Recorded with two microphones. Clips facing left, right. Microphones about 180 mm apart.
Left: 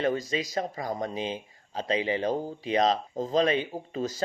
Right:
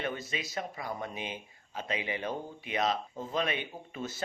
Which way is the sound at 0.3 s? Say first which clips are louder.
Left 7 dB; 40° left (ahead or behind).